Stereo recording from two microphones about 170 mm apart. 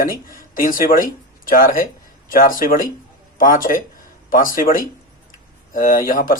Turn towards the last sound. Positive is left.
turn(degrees=55)  # may be behind; listen again after turning